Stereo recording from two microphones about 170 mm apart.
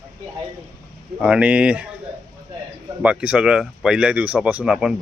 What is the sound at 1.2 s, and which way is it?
Speech, 5° right (ahead or behind).